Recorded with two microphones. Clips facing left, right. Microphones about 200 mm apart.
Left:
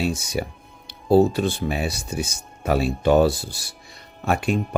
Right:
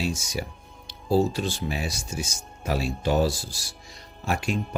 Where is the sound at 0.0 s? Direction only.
60° left (ahead or behind).